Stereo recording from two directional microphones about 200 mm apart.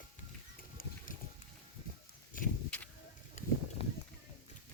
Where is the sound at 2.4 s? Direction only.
40° left (ahead or behind).